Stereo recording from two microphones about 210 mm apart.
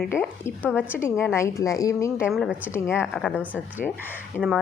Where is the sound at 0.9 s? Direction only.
10° left (ahead or behind).